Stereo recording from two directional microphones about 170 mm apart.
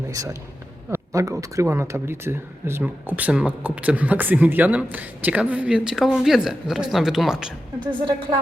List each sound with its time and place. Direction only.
0.1 s a man's voice: 20° right (ahead or behind); by 7.5 s 5° right (ahead or behind)
7.9 s speech: 30° right (ahead or behind)